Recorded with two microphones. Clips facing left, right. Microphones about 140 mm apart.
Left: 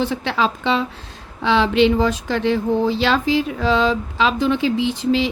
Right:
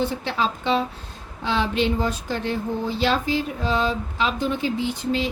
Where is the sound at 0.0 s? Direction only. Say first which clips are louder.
Left 4 dB; 90° left.